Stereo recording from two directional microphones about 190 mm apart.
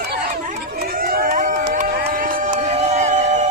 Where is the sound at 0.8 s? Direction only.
50° right (ahead or behind).